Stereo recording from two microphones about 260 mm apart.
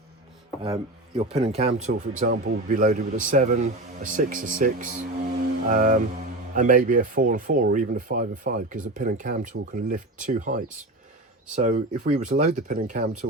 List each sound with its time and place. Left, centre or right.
0.6 s a man's voice: centre